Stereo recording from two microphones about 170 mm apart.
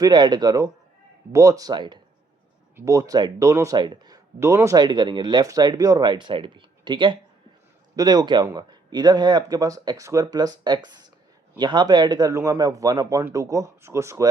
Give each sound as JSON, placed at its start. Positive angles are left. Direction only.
{"t": 0.0, "sound": "speech", "side_deg": -25}